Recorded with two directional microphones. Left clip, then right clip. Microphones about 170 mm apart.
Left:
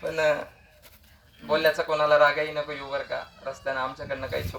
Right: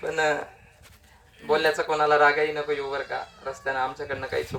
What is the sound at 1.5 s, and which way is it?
Speech, 35° right (ahead or behind).